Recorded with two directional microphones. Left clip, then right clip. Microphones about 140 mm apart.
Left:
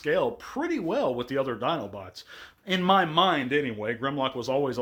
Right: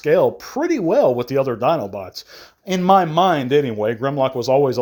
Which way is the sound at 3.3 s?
55° right (ahead or behind).